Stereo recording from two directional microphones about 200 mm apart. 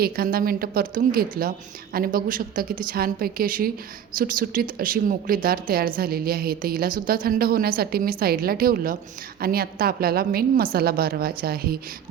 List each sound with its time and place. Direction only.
0.0 s speech: 50° right (ahead or behind)